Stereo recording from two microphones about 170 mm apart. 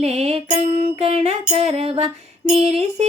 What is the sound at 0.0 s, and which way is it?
Music, 40° right (ahead or behind).